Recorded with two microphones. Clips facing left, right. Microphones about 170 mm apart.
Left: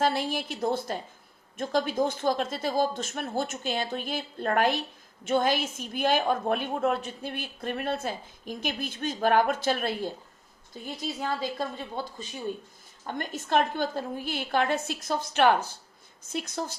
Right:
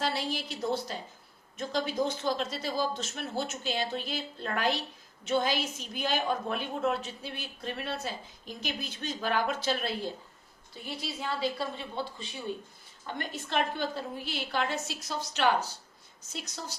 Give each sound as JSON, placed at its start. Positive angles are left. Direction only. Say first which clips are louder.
{"t": 0.0, "sound": "a woman's voice", "louder": "left 5 dB", "side_deg": 50}